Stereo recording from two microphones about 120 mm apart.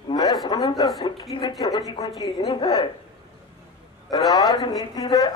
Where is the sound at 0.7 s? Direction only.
35° left (ahead or behind).